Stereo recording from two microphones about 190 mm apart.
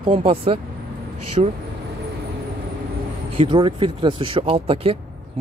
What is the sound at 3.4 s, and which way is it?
Speech, 25° right (ahead or behind).